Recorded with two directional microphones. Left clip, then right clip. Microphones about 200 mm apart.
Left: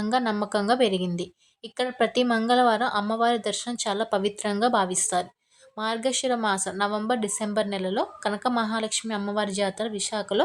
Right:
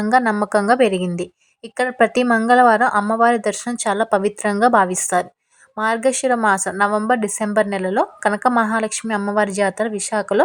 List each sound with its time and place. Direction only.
0.0 s a woman's voice: 30° right (ahead or behind)